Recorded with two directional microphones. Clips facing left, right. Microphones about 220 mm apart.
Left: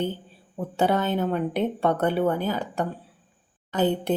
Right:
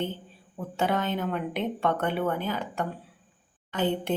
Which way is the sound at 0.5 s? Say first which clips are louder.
Left 4 dB; 35° left (ahead or behind).